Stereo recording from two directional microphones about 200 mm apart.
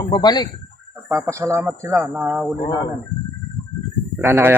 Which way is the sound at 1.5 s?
15° right (ahead or behind).